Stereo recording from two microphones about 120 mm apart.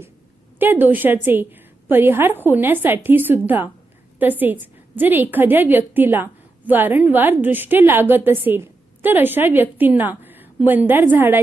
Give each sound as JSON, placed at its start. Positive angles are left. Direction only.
{"t": 0.6, "sound": "a woman's voice", "side_deg": -15}